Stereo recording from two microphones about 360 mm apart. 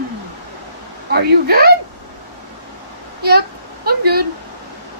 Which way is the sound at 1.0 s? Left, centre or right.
Right.